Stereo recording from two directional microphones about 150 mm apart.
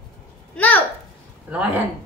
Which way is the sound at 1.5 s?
10° right (ahead or behind).